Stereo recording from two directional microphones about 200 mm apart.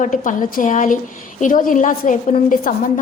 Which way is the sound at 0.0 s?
40° left (ahead or behind).